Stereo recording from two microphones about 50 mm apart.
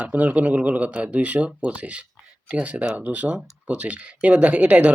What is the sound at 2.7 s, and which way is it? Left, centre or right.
Speech, centre.